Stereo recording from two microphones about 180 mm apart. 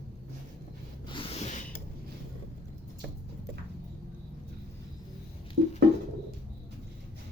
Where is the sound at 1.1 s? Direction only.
30° left (ahead or behind).